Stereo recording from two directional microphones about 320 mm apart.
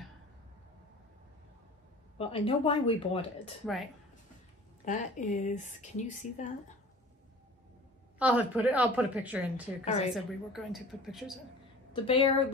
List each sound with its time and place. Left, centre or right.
2.1 s speech: centre
3.6 s a woman's voice: centre
4.8 s speech: left
8.2 s a woman's voice: centre
9.8 s speech: centre
10.1 s a woman's voice: centre
11.9 s a woman's voice: centre